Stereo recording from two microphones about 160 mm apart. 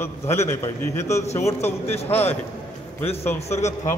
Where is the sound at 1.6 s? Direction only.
40° left (ahead or behind).